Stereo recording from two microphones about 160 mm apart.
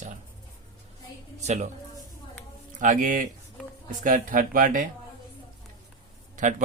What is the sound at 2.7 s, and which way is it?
A man's voice, 55° right (ahead or behind).